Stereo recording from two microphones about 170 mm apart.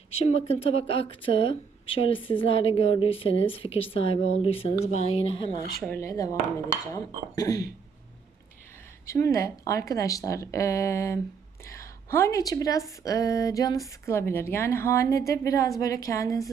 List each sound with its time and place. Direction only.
0.1 s speech: 35° left (ahead or behind)
6.0 s a woman's voice: 20° left (ahead or behind)
9.0 s a woman's voice: 15° left (ahead or behind)